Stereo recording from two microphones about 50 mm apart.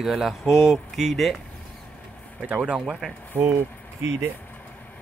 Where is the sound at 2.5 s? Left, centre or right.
Right.